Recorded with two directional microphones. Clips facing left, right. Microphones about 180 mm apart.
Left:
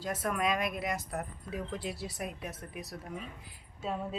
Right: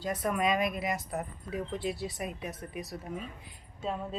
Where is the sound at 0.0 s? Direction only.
Centre (ahead or behind).